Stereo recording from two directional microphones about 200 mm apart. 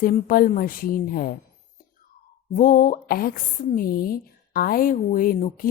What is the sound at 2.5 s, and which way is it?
A woman's voice, 40° left (ahead or behind).